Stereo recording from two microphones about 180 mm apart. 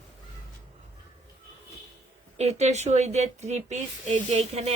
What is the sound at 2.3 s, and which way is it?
Speech, 35° right (ahead or behind).